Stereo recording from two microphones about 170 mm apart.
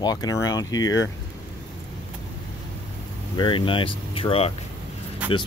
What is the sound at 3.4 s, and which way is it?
Speech, 30° left (ahead or behind).